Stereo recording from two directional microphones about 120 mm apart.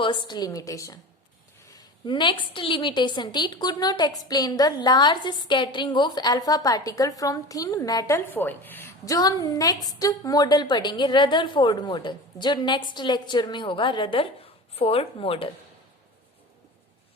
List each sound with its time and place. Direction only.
0.0 s a woman's voice: 40° left (ahead or behind)
8.3 s speech: 15° left (ahead or behind)
9.0 s a woman's voice: 30° left (ahead or behind); by 15.4 s 50° left (ahead or behind)